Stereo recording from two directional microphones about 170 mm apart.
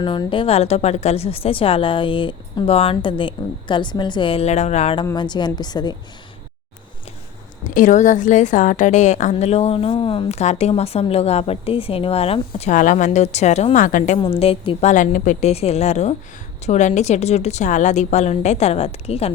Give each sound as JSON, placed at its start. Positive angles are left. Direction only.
{"t": 0.0, "sound": "a woman's voice", "side_deg": 25}
{"t": 5.1, "sound": "a woman's voice", "side_deg": 25}
{"t": 7.6, "sound": "a woman's voice", "side_deg": 50}
{"t": 14.2, "sound": "a woman's voice", "side_deg": 35}
{"t": 14.8, "sound": "a woman's voice", "side_deg": 50}